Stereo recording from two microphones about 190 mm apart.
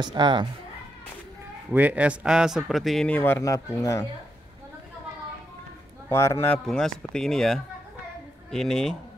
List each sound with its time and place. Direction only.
0.0 s speech: 25° right (ahead or behind)
1.7 s speech: 10° right (ahead or behind); by 4.0 s 15° left (ahead or behind)
6.0 s a man's voice: 15° left (ahead or behind)
6.6 s speech: centre (ahead or behind)